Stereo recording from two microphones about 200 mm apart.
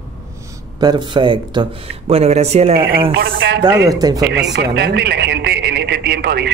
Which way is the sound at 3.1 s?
55° right (ahead or behind).